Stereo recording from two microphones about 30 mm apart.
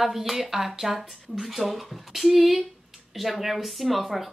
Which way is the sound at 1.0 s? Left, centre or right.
Centre.